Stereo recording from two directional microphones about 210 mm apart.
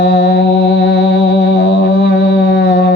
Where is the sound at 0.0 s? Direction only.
45° left (ahead or behind).